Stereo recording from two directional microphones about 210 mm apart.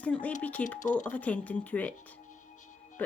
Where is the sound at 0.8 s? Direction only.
35° left (ahead or behind).